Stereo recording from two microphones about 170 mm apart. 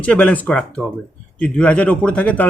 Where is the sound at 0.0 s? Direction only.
5° left (ahead or behind).